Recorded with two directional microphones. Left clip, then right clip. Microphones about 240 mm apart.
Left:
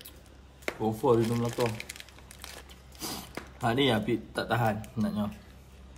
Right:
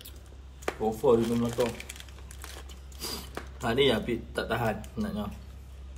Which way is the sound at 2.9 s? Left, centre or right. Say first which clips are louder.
Right 1 dB; left.